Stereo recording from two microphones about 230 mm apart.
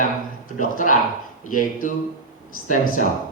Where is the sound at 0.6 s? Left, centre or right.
Left.